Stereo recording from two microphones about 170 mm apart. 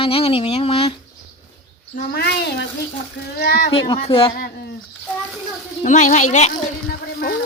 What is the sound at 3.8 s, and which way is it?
Speech, 35° left (ahead or behind).